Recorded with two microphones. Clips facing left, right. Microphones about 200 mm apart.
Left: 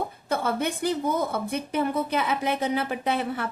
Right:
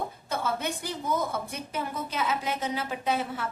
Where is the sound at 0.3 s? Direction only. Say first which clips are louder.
Left 5 dB; 60° left (ahead or behind).